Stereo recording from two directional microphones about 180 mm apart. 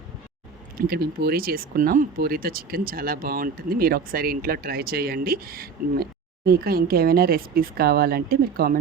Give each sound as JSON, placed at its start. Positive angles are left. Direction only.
{"t": 0.8, "sound": "speech", "side_deg": -60}